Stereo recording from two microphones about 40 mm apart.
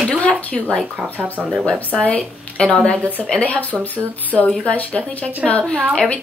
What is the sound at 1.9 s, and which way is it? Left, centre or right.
Speech, left.